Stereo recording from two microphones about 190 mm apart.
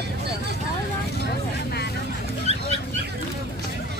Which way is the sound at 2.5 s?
35° right (ahead or behind).